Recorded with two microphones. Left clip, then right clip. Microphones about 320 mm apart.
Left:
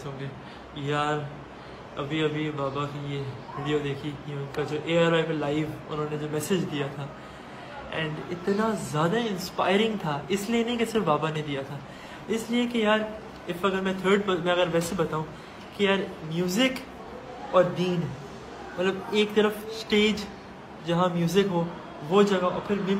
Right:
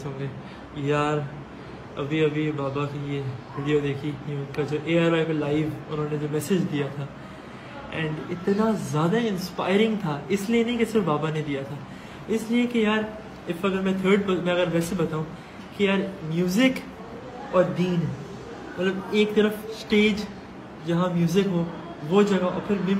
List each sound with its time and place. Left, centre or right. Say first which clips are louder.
0.8 s a man's voice: right 3 dB; centre
8.5 s a man's voice: even; centre